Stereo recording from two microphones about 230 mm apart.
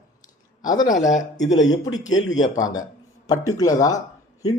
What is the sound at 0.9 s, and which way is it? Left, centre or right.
Speech, left.